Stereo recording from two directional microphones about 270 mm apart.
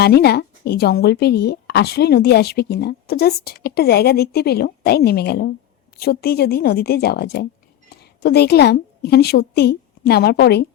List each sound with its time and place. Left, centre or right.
0.0 s a woman's voice: left